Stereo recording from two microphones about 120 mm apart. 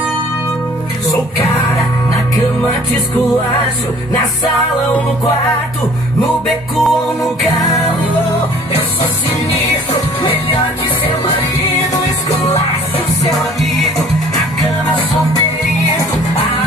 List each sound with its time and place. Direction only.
6.4 s music: centre (ahead or behind)
7.5 s music: 30° left (ahead or behind)
13.3 s music: centre (ahead or behind)